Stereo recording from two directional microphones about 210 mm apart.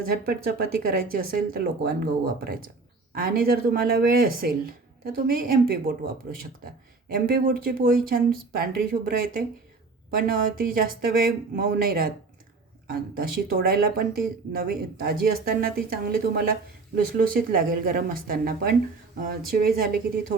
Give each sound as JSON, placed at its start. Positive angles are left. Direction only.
{"t": 0.0, "sound": "speech", "side_deg": -45}
{"t": 7.1, "sound": "speech", "side_deg": -45}